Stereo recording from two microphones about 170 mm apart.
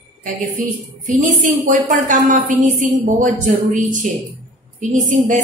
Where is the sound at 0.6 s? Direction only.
50° right (ahead or behind).